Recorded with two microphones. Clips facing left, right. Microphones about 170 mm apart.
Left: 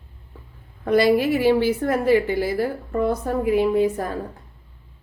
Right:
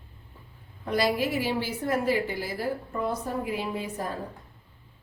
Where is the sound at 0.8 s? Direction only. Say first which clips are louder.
Left 9 dB; 60° left (ahead or behind).